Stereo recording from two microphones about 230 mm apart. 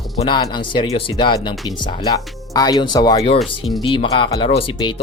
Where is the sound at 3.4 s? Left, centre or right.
Centre.